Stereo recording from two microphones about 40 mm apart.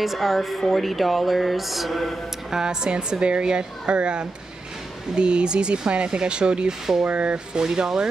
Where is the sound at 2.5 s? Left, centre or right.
Right.